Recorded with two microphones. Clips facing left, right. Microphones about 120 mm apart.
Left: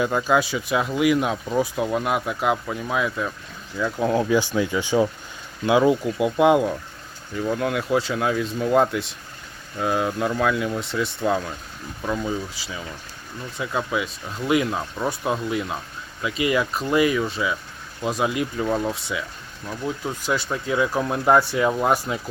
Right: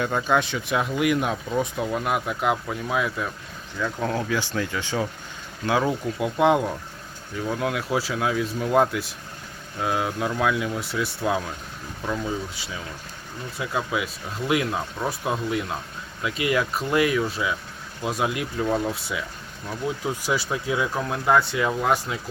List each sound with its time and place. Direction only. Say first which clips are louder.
0.0 s speech: left 2 dB; 5° left (ahead or behind)
4.1 s speech: left 6 dB; 20° left (ahead or behind)